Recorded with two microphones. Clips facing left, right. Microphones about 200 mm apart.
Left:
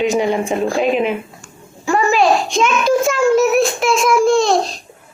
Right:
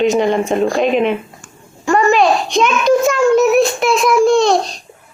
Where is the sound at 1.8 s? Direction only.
Centre (ahead or behind).